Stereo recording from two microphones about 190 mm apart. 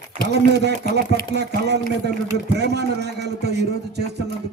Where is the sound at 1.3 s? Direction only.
60° right (ahead or behind).